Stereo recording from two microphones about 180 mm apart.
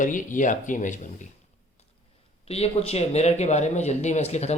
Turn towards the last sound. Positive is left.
turn(degrees=35)  # may be behind; listen again after turning